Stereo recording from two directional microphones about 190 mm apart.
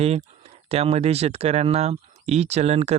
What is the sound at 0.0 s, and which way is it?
Speech, 35° right (ahead or behind).